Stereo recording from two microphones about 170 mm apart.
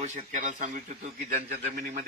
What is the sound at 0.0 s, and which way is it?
A man's voice, 45° right (ahead or behind).